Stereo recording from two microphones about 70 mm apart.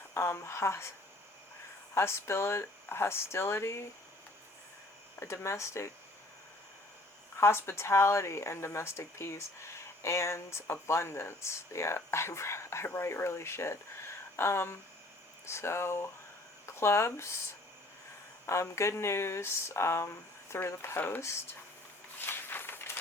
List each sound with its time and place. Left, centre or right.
0.1 s speech: left
2.0 s speech: left
5.2 s speech: left
7.3 s speech: left
18.4 s speech: left
22.3 s a sound: left